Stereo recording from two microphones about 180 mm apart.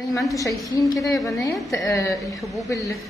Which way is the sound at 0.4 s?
15° left (ahead or behind).